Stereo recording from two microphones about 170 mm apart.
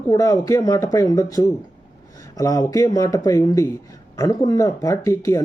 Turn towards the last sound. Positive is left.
turn(degrees=20)  # may be behind; listen again after turning